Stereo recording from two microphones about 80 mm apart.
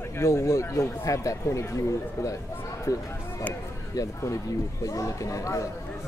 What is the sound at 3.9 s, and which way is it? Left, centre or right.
Speech, left.